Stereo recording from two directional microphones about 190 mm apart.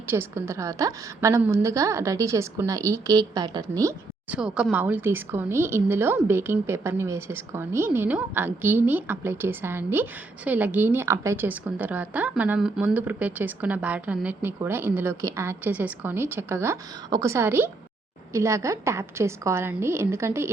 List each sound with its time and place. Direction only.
0.1 s speech: 15° right (ahead or behind)
4.4 s speech: 5° right (ahead or behind)